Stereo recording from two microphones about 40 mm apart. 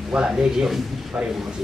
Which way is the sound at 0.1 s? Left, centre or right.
Right.